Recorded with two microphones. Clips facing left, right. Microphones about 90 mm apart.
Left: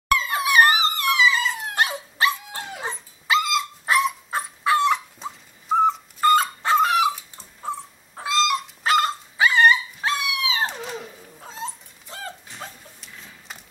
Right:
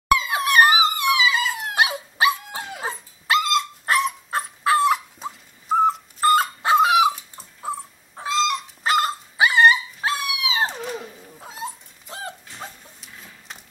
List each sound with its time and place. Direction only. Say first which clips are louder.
0.1 s dog: right 2 dB; 15° right (ahead or behind)
0.4 s dog: even; centre (ahead or behind)
0.7 s dog: right 2 dB; 10° right (ahead or behind)
10.4 s a sound: right 4 dB; 15° right (ahead or behind)
10.7 s cat: right 2 dB; centre (ahead or behind)
11.3 s dog: even; 10° right (ahead or behind)
12.5 s a sound: right 1 dB; centre (ahead or behind)